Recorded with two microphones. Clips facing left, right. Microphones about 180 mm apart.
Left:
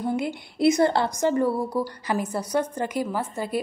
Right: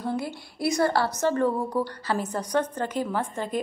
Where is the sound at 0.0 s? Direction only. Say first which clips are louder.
Left 3 dB; 20° left (ahead or behind).